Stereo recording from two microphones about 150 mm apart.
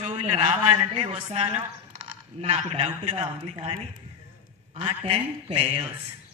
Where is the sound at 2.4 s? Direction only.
45° right (ahead or behind).